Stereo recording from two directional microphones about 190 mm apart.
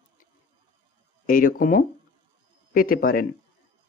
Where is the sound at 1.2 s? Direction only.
50° left (ahead or behind).